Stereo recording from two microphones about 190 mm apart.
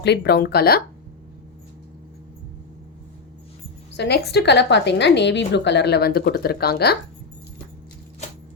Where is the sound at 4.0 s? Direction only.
60° left (ahead or behind).